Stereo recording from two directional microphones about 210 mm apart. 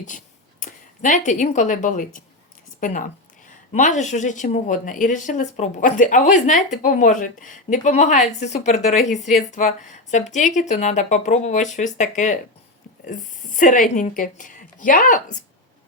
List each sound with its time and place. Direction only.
0.6 s a woman's voice: 40° left (ahead or behind)